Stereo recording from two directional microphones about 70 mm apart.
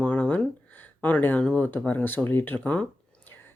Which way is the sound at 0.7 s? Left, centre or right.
Left.